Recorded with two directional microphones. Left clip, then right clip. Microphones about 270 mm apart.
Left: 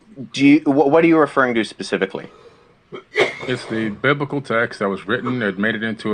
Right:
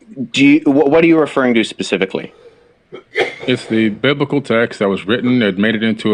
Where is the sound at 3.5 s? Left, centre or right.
Right.